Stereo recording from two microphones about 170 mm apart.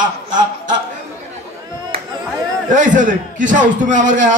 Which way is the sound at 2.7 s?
50° right (ahead or behind).